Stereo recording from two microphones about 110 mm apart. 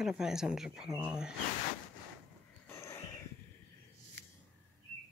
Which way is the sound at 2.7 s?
25° left (ahead or behind).